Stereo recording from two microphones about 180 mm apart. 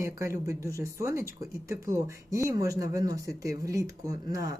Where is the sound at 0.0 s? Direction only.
15° right (ahead or behind).